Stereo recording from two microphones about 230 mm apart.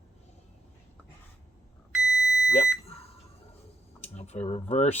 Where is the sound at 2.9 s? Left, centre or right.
Left.